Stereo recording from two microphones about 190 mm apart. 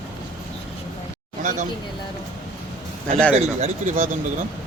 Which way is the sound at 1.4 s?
40° right (ahead or behind).